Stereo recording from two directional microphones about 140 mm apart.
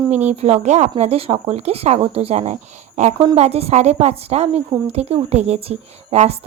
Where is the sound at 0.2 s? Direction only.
50° right (ahead or behind).